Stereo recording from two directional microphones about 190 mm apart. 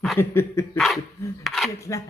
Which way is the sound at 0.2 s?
15° left (ahead or behind).